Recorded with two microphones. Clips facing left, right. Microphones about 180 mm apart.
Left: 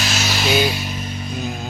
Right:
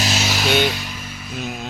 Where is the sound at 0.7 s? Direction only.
15° left (ahead or behind).